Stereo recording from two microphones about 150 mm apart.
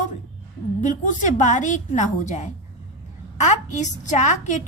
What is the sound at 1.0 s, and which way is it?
A woman's voice, 55° left (ahead or behind).